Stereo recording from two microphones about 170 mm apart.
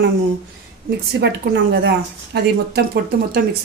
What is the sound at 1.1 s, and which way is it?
Speech, 80° right.